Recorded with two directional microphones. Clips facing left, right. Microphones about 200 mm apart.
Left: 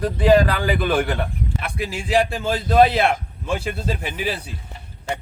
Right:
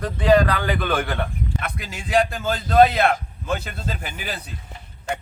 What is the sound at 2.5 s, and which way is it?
Speech, 10° left (ahead or behind).